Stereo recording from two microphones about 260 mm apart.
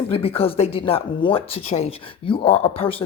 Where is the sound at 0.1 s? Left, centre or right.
Left.